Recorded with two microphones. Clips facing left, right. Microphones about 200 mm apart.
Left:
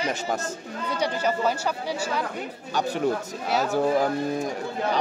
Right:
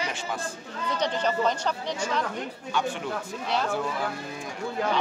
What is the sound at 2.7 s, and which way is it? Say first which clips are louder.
Speech: left 5 dB; 40° left (ahead or behind).